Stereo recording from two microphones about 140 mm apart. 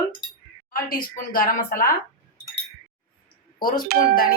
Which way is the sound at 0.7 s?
90° left.